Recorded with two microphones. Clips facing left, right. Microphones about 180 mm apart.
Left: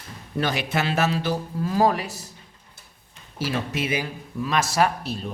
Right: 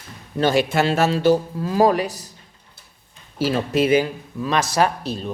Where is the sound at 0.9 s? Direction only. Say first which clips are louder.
Right 5 dB; 30° right (ahead or behind).